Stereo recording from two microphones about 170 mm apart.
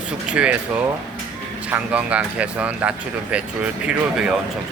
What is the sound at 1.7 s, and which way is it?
Speech, 10° right (ahead or behind).